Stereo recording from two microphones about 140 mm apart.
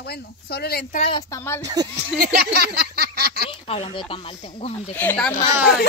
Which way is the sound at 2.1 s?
90° right.